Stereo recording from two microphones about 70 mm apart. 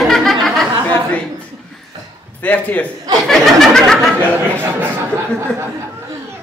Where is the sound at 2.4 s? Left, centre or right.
Left.